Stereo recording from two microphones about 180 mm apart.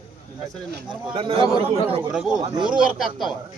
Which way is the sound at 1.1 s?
30° right (ahead or behind).